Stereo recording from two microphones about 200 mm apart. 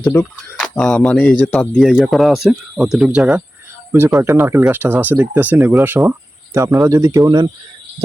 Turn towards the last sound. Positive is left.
turn(degrees=-20)  # may be behind; listen again after turning